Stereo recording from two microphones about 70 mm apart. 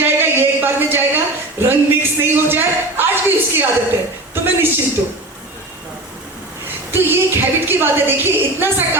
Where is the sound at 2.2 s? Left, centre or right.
Right.